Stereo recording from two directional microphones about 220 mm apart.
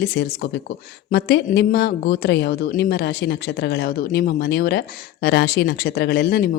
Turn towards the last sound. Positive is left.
turn(degrees=45)  # may be behind; listen again after turning